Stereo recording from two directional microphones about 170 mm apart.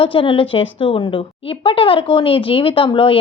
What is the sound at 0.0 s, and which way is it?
Speech, 30° left (ahead or behind).